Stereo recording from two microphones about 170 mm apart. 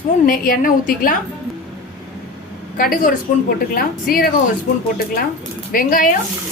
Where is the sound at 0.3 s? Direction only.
55° left (ahead or behind).